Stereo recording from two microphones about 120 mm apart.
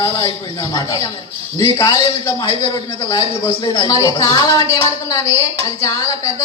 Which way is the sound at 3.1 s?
30° left (ahead or behind).